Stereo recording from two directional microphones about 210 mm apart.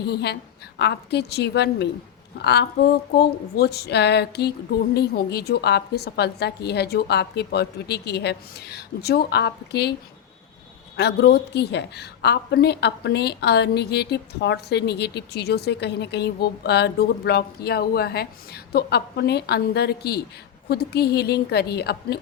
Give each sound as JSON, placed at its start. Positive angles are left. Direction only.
{"t": 0.0, "sound": "a woman's voice", "side_deg": 50}
{"t": 10.9, "sound": "a woman's voice", "side_deg": 50}